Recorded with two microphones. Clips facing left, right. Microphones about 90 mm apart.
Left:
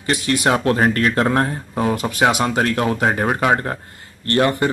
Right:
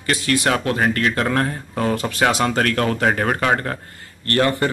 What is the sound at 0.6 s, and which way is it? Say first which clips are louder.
Speech: left 3 dB; 35° left (ahead or behind).